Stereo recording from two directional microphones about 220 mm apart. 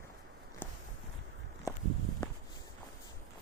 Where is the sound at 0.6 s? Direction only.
10° left (ahead or behind).